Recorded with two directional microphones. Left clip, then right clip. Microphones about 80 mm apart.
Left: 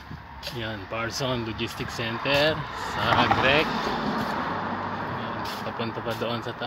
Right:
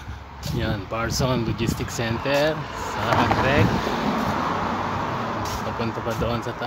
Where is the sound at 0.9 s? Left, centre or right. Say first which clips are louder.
Right 3 dB; right.